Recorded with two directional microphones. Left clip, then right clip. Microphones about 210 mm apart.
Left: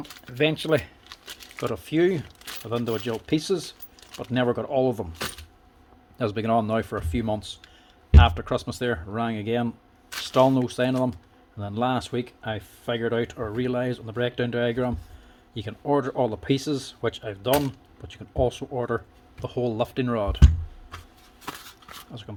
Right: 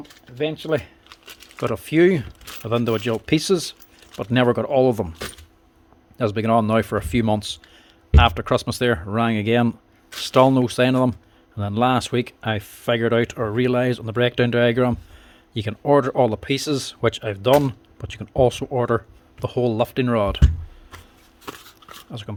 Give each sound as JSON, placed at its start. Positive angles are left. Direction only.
{"t": 0.3, "sound": "speech", "side_deg": 10}
{"t": 0.7, "sound": "shuffling cards", "side_deg": -5}
{"t": 1.5, "sound": "speech", "side_deg": -35}
{"t": 6.1, "sound": "speech", "side_deg": -30}
{"t": 22.1, "sound": "speech", "side_deg": -40}